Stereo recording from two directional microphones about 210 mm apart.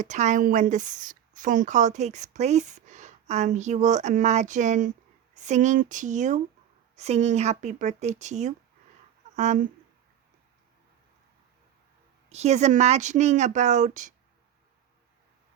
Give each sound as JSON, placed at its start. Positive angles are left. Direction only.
{"t": 0.0, "sound": "speech", "side_deg": -35}
{"t": 12.3, "sound": "speech", "side_deg": -30}